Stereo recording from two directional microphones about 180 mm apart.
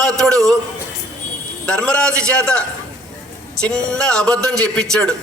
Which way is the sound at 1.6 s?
5° left (ahead or behind).